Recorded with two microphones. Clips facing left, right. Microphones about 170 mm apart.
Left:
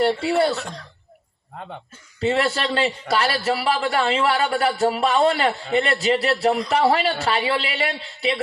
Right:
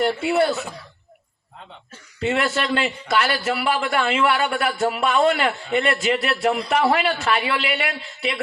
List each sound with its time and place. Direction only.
0.0 s a man's voice: 30° left (ahead or behind)
0.5 s speech: 5° right (ahead or behind)
1.6 s speech: 55° left (ahead or behind)
2.2 s a man's voice: 35° left (ahead or behind)